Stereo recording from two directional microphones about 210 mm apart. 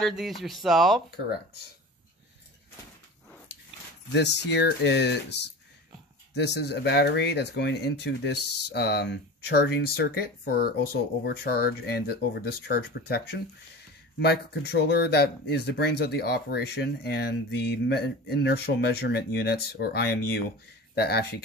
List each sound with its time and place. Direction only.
0.0 s speech: centre (ahead or behind)
4.1 s speech: 55° left (ahead or behind)
14.2 s speech: 50° left (ahead or behind)